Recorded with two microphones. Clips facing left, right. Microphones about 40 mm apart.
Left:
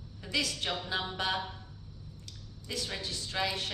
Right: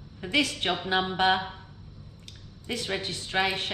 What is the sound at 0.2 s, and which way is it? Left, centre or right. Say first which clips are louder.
Speech: right 7 dB; right.